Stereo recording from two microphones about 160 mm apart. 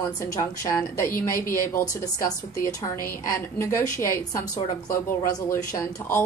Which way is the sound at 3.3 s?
20° left (ahead or behind).